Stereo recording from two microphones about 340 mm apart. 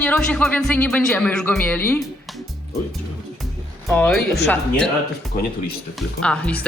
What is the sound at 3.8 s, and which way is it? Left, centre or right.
Speech, centre.